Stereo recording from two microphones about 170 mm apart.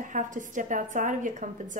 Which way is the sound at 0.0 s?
50° right (ahead or behind).